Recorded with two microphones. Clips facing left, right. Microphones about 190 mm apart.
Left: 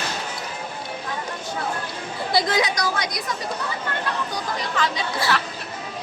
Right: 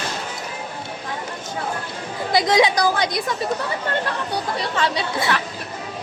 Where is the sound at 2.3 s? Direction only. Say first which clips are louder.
Right 5 dB; 20° right (ahead or behind).